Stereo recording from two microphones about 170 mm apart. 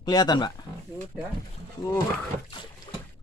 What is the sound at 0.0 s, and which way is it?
Speech, 25° left (ahead or behind).